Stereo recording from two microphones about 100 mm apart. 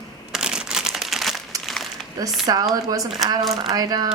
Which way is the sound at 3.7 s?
40° right (ahead or behind).